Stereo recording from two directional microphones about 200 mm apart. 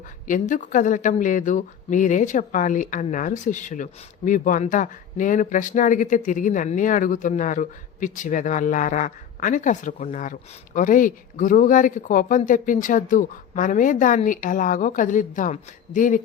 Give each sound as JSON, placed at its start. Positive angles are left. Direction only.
{"t": 0.3, "sound": "speech", "side_deg": 40}